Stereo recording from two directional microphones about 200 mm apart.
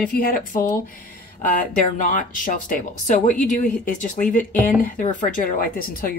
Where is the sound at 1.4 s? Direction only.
40° left (ahead or behind).